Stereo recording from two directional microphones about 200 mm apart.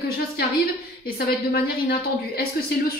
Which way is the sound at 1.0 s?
50° left (ahead or behind).